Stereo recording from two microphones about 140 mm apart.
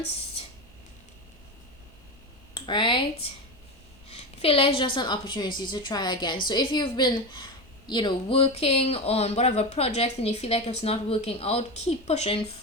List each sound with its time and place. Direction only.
2.6 s speech: 35° left (ahead or behind)
4.1 s a woman's voice: 45° left (ahead or behind)